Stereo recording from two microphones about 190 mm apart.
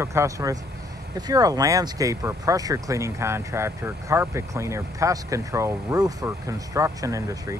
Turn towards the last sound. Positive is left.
turn(degrees=-15)  # may be behind; listen again after turning